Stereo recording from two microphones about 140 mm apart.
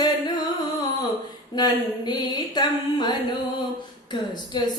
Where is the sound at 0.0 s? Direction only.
30° left (ahead or behind).